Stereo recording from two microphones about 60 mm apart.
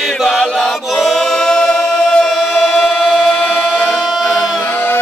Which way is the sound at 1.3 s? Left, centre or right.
Centre.